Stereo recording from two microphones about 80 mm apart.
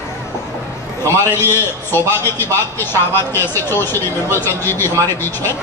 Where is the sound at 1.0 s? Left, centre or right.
Left.